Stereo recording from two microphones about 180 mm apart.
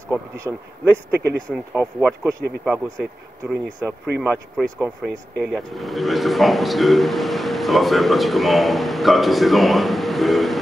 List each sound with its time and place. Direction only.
0.1 s a man's voice: 15° right (ahead or behind); by 10.6 s centre (ahead or behind)